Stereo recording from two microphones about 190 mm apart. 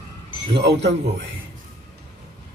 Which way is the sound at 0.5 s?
65° right (ahead or behind).